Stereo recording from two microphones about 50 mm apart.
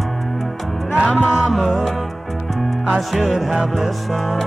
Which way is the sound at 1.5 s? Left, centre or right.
Centre.